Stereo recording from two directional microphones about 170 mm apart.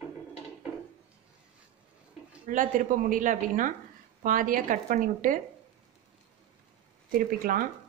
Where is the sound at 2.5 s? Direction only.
50° right (ahead or behind).